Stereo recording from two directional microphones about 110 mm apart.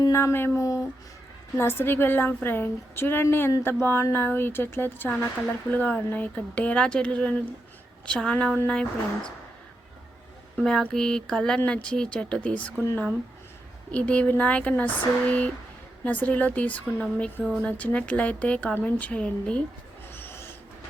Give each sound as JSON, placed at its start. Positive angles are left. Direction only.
{"t": 0.0, "sound": "a woman's voice", "side_deg": 25}
{"t": 10.6, "sound": "speech", "side_deg": 5}
{"t": 13.9, "sound": "speech", "side_deg": 10}
{"t": 20.1, "sound": "owl", "side_deg": 20}